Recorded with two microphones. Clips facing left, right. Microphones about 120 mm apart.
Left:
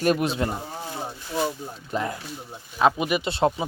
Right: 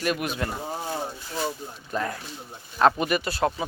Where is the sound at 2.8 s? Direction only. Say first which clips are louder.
Even; 5° left (ahead or behind).